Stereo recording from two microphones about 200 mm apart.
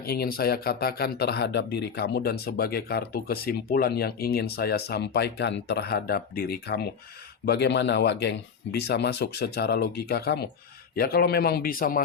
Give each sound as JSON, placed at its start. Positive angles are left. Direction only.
{"t": 0.0, "sound": "speech", "side_deg": 50}